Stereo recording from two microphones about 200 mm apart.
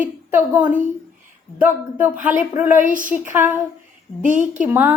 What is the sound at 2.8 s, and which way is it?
Speech, 40° right (ahead or behind).